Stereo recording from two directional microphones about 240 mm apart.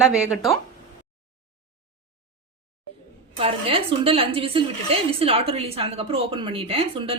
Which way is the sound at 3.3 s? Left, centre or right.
Right.